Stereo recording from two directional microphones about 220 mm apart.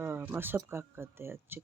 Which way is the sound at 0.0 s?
10° right (ahead or behind).